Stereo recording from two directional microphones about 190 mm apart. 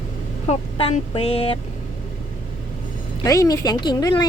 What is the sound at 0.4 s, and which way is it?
Speech, 35° left (ahead or behind).